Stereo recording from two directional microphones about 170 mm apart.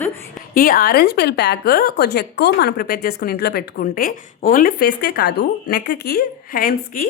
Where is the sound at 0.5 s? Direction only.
60° left (ahead or behind).